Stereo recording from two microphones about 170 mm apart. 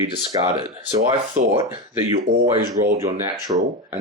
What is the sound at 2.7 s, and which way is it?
Speech, 50° right (ahead or behind).